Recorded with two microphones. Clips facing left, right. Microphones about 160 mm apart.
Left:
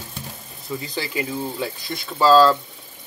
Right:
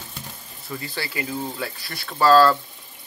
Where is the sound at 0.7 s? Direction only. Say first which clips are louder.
Left 3 dB; 15° left (ahead or behind).